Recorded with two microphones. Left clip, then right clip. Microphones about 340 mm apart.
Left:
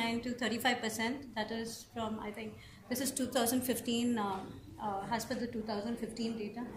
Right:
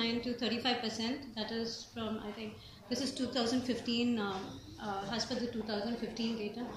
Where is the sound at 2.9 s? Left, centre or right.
Left.